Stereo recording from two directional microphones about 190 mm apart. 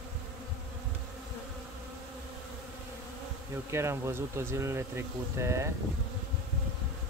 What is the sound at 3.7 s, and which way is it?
Speech, 15° right (ahead or behind).